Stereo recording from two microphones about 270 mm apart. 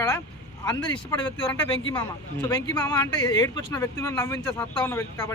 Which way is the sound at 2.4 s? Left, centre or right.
Centre.